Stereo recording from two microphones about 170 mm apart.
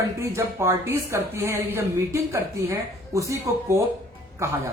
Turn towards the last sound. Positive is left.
turn(degrees=-15)  # may be behind; listen again after turning